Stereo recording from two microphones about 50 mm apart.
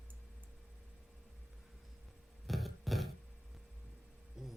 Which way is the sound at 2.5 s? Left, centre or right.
Centre.